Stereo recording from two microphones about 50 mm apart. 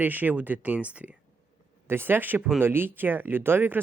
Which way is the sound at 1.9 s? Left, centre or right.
Right.